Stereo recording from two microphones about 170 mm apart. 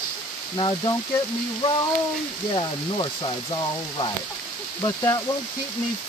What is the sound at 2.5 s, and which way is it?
Speech, 30° left (ahead or behind).